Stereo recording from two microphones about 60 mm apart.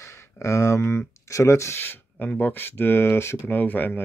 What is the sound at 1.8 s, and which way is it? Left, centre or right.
Speech, left.